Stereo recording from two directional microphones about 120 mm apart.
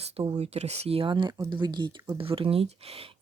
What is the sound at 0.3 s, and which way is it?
Speech, 65° right (ahead or behind).